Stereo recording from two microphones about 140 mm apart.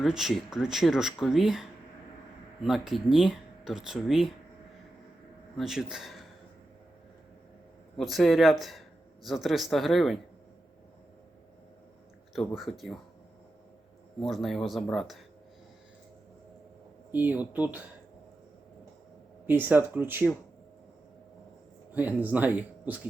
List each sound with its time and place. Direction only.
0.0 s speech: centre (ahead or behind)
2.6 s speech: centre (ahead or behind)
5.5 s speech: 5° right (ahead or behind)
7.9 s speech: centre (ahead or behind)
12.3 s speech: centre (ahead or behind)
14.2 s speech: centre (ahead or behind)
17.1 s speech: 10° right (ahead or behind)
19.5 s speech: 15° right (ahead or behind)
21.9 s speech: 10° right (ahead or behind)